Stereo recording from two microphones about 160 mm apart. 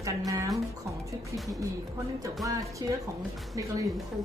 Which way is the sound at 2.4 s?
20° right (ahead or behind).